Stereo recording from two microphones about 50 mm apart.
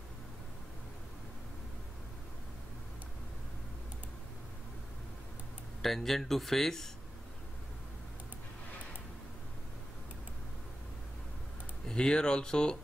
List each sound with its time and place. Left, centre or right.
5.8 s speech: centre
11.9 s speech: centre